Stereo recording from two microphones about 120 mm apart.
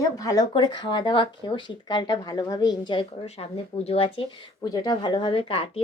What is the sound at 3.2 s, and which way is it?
Speech, 60° left (ahead or behind).